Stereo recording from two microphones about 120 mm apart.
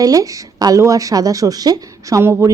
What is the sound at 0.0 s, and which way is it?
Speech, 30° right (ahead or behind).